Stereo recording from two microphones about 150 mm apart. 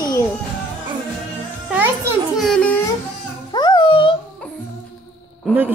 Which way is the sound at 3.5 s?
30° left (ahead or behind).